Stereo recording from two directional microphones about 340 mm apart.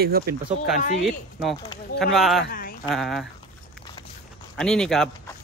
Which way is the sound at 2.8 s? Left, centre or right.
Centre.